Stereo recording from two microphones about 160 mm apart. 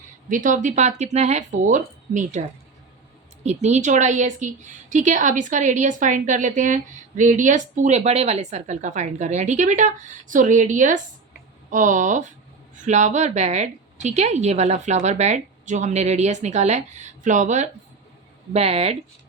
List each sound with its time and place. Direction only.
0.3 s a woman's voice: 55° right (ahead or behind)
3.4 s a woman's voice: 45° right (ahead or behind)